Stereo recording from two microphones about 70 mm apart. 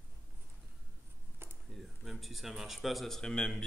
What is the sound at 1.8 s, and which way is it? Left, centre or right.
Speech, centre.